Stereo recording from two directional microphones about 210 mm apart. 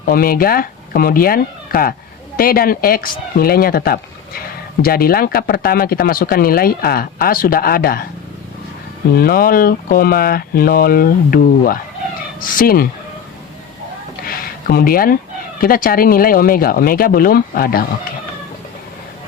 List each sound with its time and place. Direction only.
0.0 s speech: 45° left (ahead or behind)
9.1 s speech: 45° left (ahead or behind)
14.3 s a sound: 45° left (ahead or behind)
15.6 s speech: 45° left (ahead or behind)